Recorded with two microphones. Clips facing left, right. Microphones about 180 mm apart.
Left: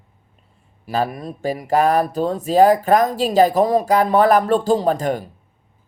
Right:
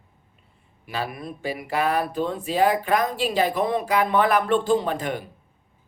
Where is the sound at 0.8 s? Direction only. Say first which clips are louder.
Left 8 dB; 40° left (ahead or behind).